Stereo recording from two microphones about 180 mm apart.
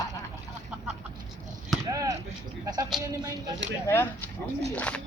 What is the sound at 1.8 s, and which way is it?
Chop, 20° right (ahead or behind).